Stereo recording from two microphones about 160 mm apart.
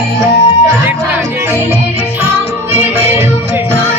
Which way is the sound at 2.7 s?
15° right (ahead or behind).